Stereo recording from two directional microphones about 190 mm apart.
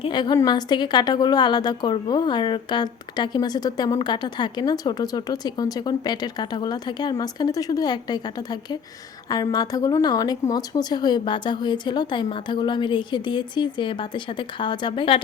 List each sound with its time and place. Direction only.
0.0 s a woman's voice: 25° left (ahead or behind)